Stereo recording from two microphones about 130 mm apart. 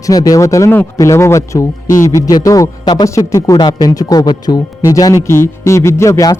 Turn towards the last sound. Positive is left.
turn(degrees=25)  # may be behind; listen again after turning